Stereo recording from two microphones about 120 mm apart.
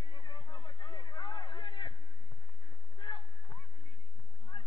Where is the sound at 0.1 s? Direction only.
40° left (ahead or behind).